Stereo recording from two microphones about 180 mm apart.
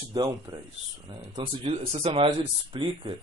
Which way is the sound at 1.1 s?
25° right (ahead or behind).